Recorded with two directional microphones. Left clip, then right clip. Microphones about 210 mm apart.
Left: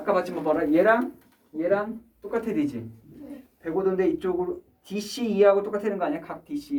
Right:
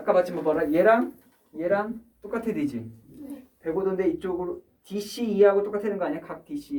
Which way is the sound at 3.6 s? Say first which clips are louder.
Left 1 dB; 20° left (ahead or behind).